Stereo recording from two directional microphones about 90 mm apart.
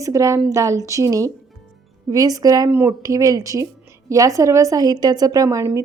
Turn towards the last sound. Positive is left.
turn(degrees=-40)  # may be behind; listen again after turning